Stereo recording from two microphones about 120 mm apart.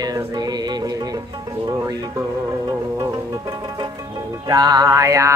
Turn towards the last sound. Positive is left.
turn(degrees=-25)  # may be behind; listen again after turning